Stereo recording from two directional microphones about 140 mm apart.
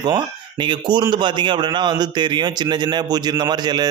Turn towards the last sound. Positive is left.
turn(degrees=-30)  # may be behind; listen again after turning